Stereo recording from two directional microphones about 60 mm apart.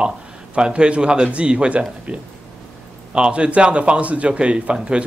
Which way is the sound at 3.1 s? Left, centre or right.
Centre.